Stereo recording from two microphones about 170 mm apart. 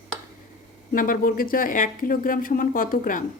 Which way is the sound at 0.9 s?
55° left (ahead or behind).